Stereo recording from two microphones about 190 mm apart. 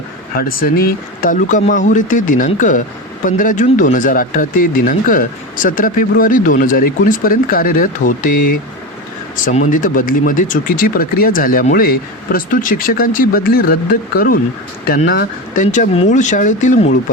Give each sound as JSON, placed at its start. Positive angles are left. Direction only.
{"t": 0.3, "sound": "speech", "side_deg": 50}